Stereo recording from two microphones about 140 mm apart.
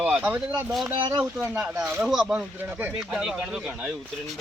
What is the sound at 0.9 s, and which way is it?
Speech, 35° right (ahead or behind).